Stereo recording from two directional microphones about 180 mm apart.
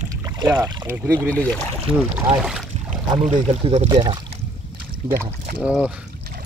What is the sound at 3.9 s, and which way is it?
Speech, 25° right (ahead or behind).